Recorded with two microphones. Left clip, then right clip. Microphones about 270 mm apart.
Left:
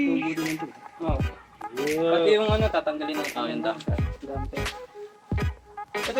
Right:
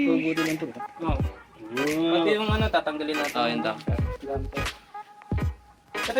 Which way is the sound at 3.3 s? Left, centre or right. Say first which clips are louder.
Right 4 dB; right.